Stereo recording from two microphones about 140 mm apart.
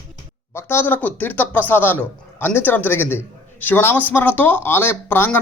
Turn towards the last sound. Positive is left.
turn(degrees=15)  # may be behind; listen again after turning